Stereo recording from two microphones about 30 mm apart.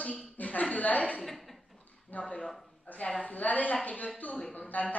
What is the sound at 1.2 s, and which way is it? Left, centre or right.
Speech, centre.